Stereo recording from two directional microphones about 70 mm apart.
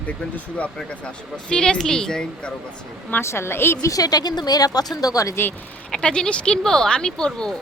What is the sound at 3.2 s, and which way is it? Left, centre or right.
Speech, left.